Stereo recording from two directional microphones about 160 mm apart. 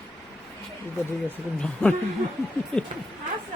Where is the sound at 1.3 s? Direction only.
5° left (ahead or behind).